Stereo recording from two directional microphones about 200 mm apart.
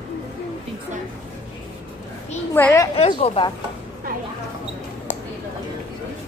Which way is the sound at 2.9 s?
30° left (ahead or behind).